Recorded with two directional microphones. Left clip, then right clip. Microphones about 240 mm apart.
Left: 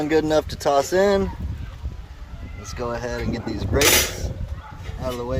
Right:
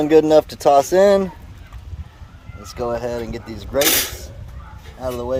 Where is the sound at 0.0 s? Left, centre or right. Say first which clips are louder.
Right 7 dB; right.